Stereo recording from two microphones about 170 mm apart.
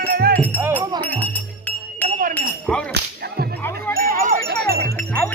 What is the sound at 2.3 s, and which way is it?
Speech, 5° left (ahead or behind).